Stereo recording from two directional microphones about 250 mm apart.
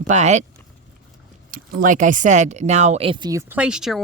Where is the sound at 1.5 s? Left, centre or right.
Right.